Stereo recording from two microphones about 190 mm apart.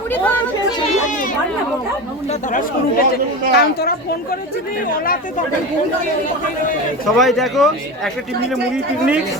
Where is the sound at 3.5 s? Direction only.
55° left (ahead or behind).